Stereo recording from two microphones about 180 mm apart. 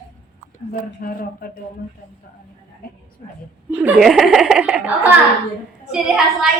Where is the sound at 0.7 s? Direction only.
55° left (ahead or behind).